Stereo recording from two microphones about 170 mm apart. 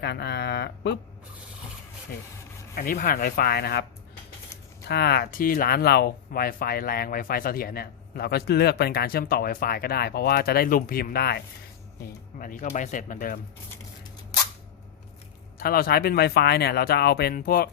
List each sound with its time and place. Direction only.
0.0 s speech: 80° left
2.7 s speech: 55° left (ahead or behind); by 3.8 s 70° left (ahead or behind)
4.9 s speech: 70° left (ahead or behind)
12.4 s speech: 50° left (ahead or behind)
15.5 s speech: 60° left (ahead or behind)